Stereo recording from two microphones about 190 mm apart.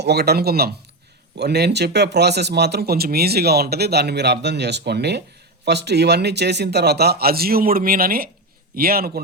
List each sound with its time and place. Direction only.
0.0 s a man's voice: 60° right (ahead or behind)